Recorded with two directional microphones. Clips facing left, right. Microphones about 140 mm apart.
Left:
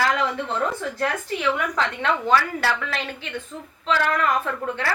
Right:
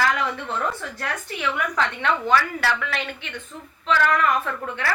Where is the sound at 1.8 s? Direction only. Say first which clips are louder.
Even; 30° left (ahead or behind).